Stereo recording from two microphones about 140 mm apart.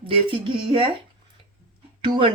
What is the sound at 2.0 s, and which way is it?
Speech, 35° right (ahead or behind).